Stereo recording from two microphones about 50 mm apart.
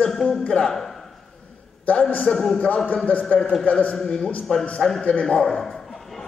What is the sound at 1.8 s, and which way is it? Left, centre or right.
Speech, left.